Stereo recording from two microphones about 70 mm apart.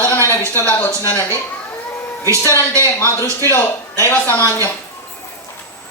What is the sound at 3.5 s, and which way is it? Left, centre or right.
Speech, left.